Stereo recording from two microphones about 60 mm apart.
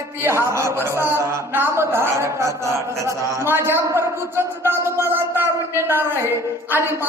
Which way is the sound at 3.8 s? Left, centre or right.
Right.